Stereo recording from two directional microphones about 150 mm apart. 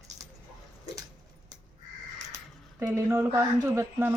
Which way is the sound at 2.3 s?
20° right (ahead or behind).